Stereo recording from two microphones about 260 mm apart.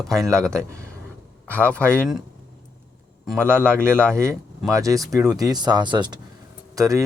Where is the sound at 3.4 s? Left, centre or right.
Centre.